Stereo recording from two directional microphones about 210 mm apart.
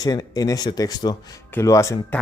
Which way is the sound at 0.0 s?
20° left (ahead or behind).